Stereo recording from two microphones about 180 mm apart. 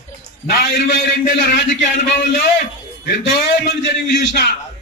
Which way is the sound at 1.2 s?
50° left (ahead or behind).